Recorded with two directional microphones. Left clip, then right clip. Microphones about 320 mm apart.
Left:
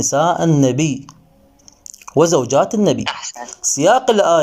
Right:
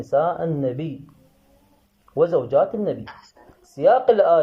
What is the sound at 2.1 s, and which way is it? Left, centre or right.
Speech, left.